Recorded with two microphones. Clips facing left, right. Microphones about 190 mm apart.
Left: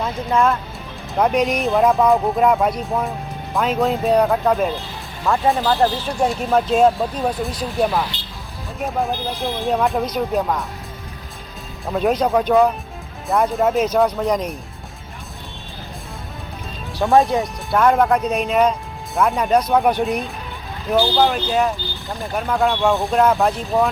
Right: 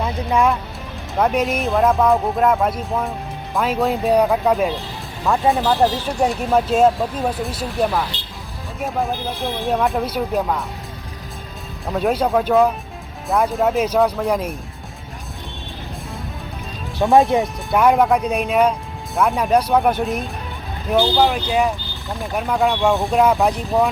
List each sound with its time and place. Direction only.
0.0 s speech: 15° right (ahead or behind)
1.1 s speech: centre (ahead or behind)
11.9 s speech: centre (ahead or behind)
17.3 s speech: 20° right (ahead or behind)
17.7 s speech: 5° right (ahead or behind)